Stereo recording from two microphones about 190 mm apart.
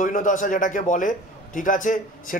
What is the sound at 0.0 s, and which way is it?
Speech, 45° left (ahead or behind).